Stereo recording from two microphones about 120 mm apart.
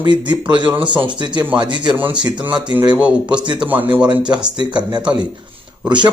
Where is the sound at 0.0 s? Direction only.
40° right (ahead or behind).